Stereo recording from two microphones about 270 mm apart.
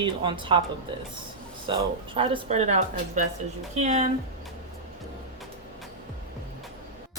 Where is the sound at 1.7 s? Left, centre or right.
Centre.